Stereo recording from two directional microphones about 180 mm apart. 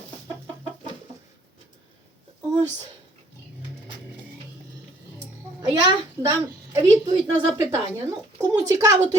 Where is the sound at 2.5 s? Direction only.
20° right (ahead or behind).